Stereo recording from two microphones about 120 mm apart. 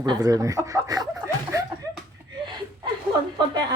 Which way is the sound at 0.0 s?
35° right (ahead or behind).